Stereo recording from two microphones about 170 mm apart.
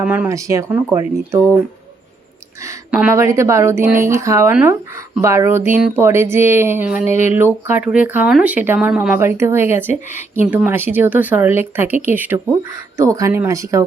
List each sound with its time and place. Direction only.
0.0 s speech: 10° right (ahead or behind)
2.9 s speech: 10° right (ahead or behind)